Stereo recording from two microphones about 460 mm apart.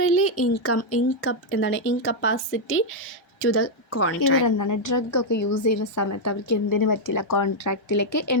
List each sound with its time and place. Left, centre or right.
0.0 s a woman's voice: left